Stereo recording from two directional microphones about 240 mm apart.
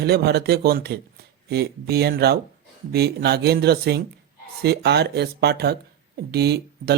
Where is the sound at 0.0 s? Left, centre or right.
Right.